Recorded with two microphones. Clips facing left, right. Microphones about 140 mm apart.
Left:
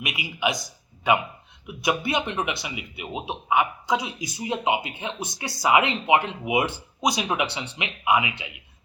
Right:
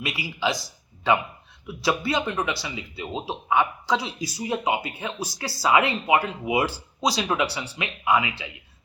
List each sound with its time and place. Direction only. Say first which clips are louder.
0.0 s speech: even; 20° left (ahead or behind)
1.6 s speech: right 1 dB; 20° left (ahead or behind)